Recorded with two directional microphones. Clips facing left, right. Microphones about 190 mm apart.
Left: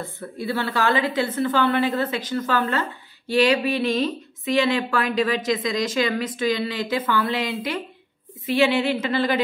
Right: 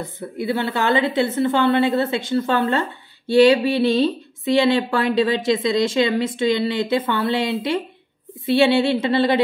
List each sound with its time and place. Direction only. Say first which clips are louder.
0.0 s speech: right 4 dB; 20° right (ahead or behind)